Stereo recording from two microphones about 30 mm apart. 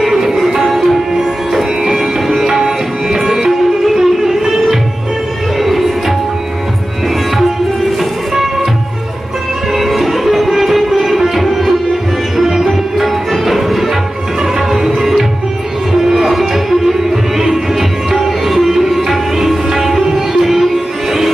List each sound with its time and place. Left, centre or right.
0.0 s music: centre
0.7 s sitar: centre
2.2 s music: centre
9.8 s music: centre
12.6 s music: centre
15.0 s music: centre
18.1 s music: centre